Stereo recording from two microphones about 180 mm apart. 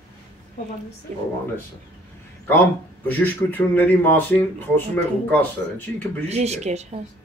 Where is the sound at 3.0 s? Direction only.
10° left (ahead or behind).